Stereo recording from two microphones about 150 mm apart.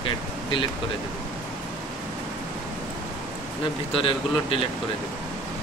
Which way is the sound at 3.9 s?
35° left (ahead or behind).